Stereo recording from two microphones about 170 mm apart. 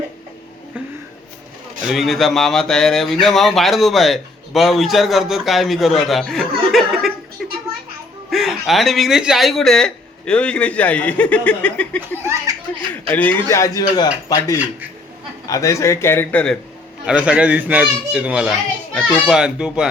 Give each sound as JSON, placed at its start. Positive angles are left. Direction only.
{"t": 1.9, "sound": "speech", "side_deg": 0}
{"t": 8.3, "sound": "speech", "side_deg": 0}
{"t": 12.1, "sound": "laughter", "side_deg": -15}
{"t": 13.1, "sound": "a man's voice", "side_deg": 10}
{"t": 17.1, "sound": "a child's voice", "side_deg": -5}